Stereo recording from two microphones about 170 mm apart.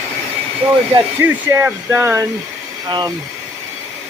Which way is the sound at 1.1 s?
10° right (ahead or behind).